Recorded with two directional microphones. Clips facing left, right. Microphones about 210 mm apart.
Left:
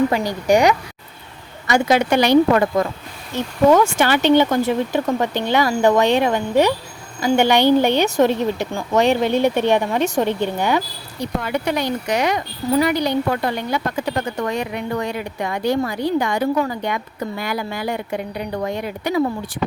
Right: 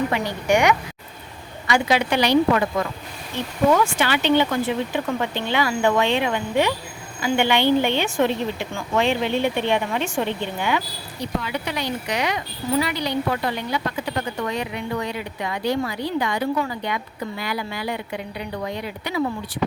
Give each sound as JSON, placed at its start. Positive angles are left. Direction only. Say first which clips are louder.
{"t": 0.1, "sound": "a woman's voice", "louder": "left 4 dB", "side_deg": 35}